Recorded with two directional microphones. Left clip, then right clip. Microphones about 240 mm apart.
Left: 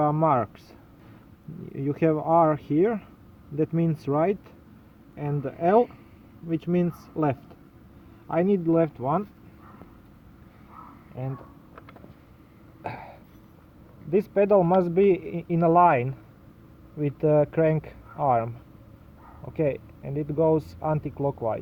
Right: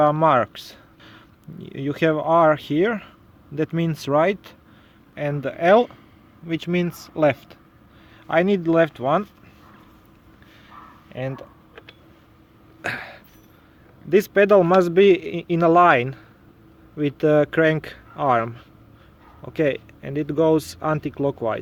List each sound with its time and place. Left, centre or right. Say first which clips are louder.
0.0 s a man's voice: right 6 dB; right
11.1 s speech: right 8 dB; right
12.8 s a sound: right 8 dB; right
14.1 s a man's voice: right 5 dB; right
19.5 s a man's voice: right 5 dB; right